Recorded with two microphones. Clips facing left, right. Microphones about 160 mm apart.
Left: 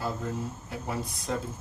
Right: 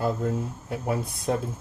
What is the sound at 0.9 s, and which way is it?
Speech, 55° right (ahead or behind).